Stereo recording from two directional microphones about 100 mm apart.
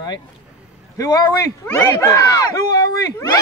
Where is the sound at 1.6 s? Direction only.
25° left (ahead or behind).